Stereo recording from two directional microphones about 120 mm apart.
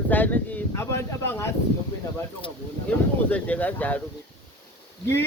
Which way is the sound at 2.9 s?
15° left (ahead or behind).